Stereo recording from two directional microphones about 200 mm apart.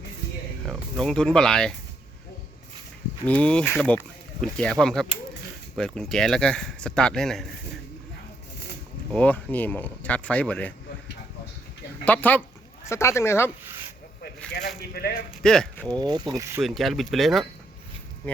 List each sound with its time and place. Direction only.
0.6 s speech: centre (ahead or behind)
3.2 s speech: 5° left (ahead or behind)
9.1 s speech: 5° left (ahead or behind)
12.0 s speech: 10° left (ahead or behind)
14.2 s speech: 50° left (ahead or behind)
15.4 s speech: 5° left (ahead or behind)
16.0 s speech: 20° right (ahead or behind)
16.6 s speech: centre (ahead or behind)